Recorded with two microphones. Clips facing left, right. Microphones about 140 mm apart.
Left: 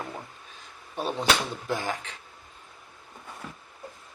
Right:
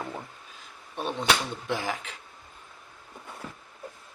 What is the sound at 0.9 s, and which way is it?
Speech, 5° left (ahead or behind).